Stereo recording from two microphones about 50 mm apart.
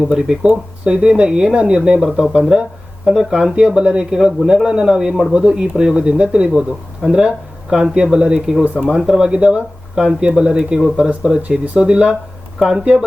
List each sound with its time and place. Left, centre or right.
0.0 s speech: centre
3.1 s speech: centre
12.5 s speech: centre
12.8 s speech: centre